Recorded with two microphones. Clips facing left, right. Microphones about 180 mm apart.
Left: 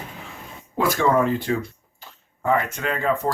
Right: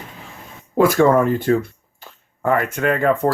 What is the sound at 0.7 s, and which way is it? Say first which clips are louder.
Speech: right 6 dB; 50° right (ahead or behind).